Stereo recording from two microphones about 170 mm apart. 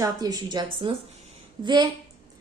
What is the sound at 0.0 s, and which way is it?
A woman's voice, 20° right (ahead or behind).